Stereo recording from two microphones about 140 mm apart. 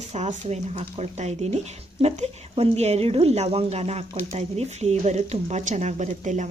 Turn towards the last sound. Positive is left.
turn(degrees=-60)  # may be behind; listen again after turning